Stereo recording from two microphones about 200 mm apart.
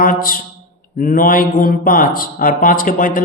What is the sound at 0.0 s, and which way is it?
Speech, 45° left (ahead or behind).